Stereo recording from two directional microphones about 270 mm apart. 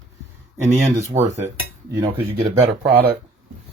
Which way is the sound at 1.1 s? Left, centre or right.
Right.